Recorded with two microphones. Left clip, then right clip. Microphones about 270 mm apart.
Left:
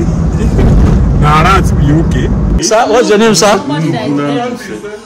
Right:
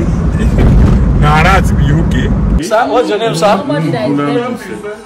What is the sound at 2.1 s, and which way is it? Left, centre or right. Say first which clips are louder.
A man's voice: left 1 dB; left.